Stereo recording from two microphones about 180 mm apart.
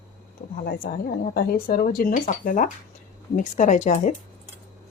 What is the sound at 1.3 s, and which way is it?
Speech, 60° left (ahead or behind).